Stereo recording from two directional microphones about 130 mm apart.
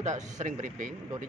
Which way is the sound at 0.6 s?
85° right.